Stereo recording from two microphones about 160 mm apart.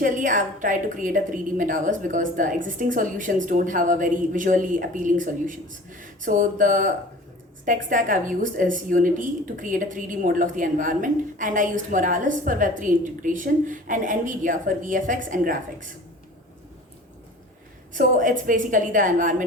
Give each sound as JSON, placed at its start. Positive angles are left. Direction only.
{"t": 0.0, "sound": "a woman's voice", "side_deg": -55}
{"t": 17.9, "sound": "a woman's voice", "side_deg": -55}